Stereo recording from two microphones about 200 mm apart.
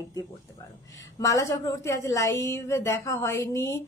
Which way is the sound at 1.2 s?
15° left (ahead or behind).